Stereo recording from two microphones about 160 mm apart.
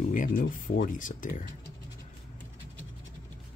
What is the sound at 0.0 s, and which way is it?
Speech, 60° left (ahead or behind).